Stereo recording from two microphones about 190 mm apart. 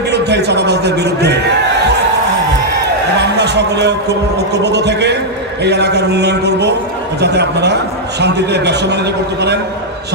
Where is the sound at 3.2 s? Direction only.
60° right (ahead or behind).